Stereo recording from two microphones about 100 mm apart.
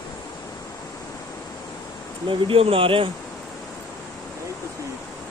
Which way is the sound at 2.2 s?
65° right (ahead or behind).